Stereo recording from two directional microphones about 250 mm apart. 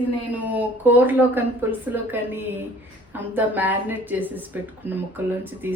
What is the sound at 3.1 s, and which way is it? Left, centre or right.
A woman's voice, centre.